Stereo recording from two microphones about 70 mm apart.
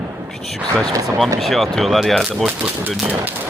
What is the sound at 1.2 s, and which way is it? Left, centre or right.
Speech, centre.